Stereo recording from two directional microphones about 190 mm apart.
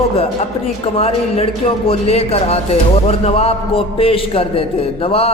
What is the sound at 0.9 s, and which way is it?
A man's voice, 30° left (ahead or behind).